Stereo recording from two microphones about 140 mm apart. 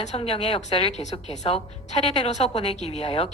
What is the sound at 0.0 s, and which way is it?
A woman's voice, 50° left (ahead or behind).